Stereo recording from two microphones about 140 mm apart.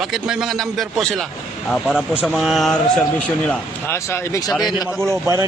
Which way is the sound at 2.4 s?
Centre (ahead or behind).